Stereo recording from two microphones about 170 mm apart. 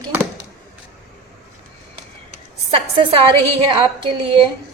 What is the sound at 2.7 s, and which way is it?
A woman's voice, 30° right (ahead or behind).